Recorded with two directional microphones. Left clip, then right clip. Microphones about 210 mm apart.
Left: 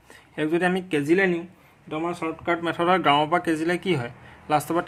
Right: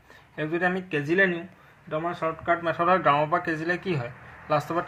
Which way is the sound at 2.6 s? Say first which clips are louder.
Left 2 dB; 45° left (ahead or behind).